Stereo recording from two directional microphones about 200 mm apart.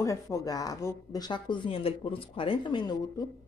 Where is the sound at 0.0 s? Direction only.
15° left (ahead or behind).